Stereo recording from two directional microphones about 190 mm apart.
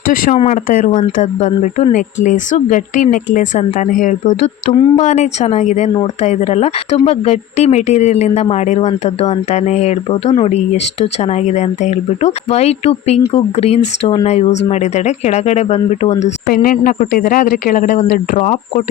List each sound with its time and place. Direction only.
0.3 s speech: 40° left (ahead or behind)
16.5 s speech: 50° left (ahead or behind)